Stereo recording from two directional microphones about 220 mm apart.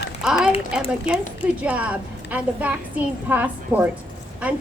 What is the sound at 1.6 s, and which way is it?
A woman's voice, 5° right (ahead or behind).